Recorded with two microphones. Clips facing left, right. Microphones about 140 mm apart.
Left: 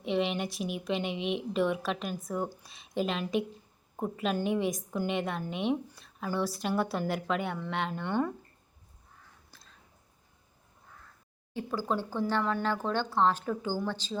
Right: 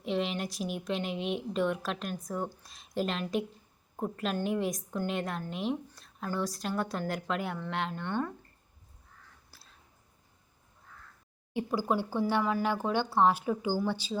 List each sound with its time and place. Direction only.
0.0 s a woman's voice: centre (ahead or behind)
9.5 s a sound: 5° right (ahead or behind)
11.5 s speech: 10° right (ahead or behind)